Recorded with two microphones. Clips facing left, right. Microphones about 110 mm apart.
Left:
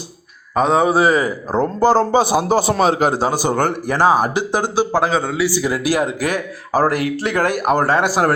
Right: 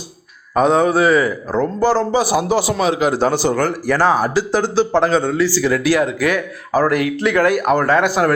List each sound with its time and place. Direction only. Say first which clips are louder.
0.5 s speech: right 1 dB; centre (ahead or behind)
1.5 s speech: left 2 dB; 40° left (ahead or behind)
2.1 s a man's voice: left 1 dB; 25° left (ahead or behind)
2.4 s a man's voice: left 1 dB; 40° left (ahead or behind)
3.2 s speech: right 1 dB; 15° left (ahead or behind)
5.5 s speech: right 3 dB; 15° left (ahead or behind)
6.1 s speech: right 3 dB; 35° left (ahead or behind)